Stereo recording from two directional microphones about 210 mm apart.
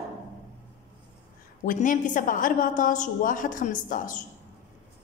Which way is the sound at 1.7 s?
40° left (ahead or behind).